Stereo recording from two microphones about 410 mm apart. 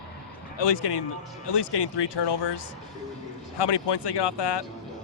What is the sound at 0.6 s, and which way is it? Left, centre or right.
Speech, left.